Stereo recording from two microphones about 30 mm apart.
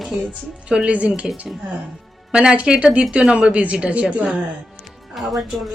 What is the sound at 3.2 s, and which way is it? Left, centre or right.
Speech, right.